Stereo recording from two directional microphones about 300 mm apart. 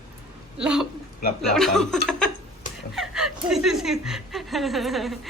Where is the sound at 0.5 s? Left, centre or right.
Centre.